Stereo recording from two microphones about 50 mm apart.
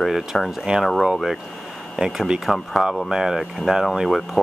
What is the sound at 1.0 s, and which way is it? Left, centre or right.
Speech, centre.